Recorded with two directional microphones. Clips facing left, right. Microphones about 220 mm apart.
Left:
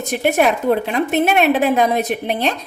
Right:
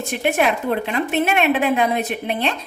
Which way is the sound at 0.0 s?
40° left (ahead or behind).